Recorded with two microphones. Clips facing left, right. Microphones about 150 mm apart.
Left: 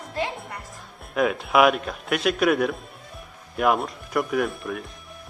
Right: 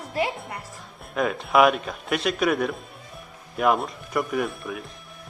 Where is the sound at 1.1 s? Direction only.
5° left (ahead or behind).